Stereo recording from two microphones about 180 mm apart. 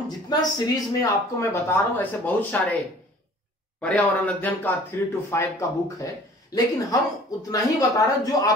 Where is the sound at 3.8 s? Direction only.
5° left (ahead or behind).